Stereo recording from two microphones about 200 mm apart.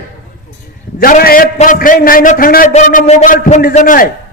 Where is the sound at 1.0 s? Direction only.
50° left (ahead or behind).